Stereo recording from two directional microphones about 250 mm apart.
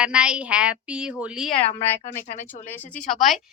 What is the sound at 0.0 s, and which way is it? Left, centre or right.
Speech, centre.